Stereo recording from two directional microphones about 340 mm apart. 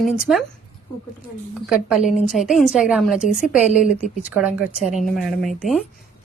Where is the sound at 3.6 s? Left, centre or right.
Left.